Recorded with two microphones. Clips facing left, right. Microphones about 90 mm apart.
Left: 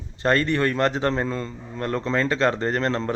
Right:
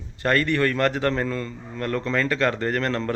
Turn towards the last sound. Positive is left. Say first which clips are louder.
# left 1 dB
turn(degrees=25)  # may be behind; listen again after turning